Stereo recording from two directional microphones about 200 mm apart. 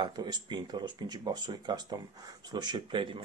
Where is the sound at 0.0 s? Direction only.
20° right (ahead or behind).